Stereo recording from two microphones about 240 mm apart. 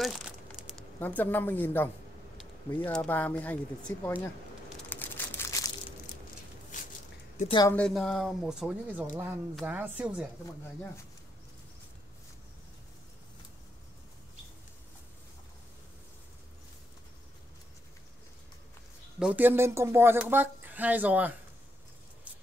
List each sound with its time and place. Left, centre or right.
0.0 s crumpling: centre
0.9 s speech: centre
4.8 s a sound: centre
7.3 s speech: left
7.7 s speech: centre
19.1 s speech: centre